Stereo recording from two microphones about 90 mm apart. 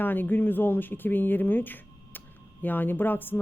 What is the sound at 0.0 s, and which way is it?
A woman's voice, 20° left (ahead or behind).